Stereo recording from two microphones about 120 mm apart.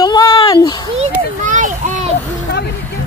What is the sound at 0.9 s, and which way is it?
A child's voice, 90° right.